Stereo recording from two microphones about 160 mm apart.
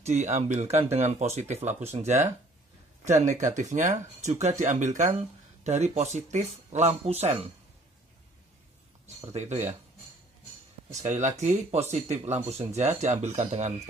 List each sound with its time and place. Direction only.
0.0 s speech: 45° right (ahead or behind)
9.3 s speech: 45° right (ahead or behind)
11.0 s speech: 50° right (ahead or behind)